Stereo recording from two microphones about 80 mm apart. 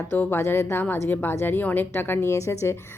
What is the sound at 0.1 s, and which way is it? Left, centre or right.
A woman's voice, left.